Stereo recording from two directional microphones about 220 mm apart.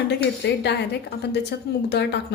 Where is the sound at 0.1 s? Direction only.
50° left (ahead or behind).